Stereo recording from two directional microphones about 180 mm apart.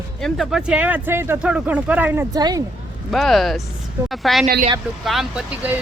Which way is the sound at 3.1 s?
Centre (ahead or behind).